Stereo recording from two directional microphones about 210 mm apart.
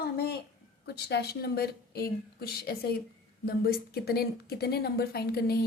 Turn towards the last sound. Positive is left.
turn(degrees=50)  # may be behind; listen again after turning